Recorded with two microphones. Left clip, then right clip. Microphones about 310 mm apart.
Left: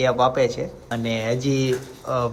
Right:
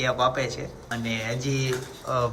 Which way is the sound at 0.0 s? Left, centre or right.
Centre.